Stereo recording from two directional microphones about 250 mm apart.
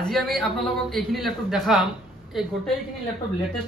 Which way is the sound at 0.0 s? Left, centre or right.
Centre.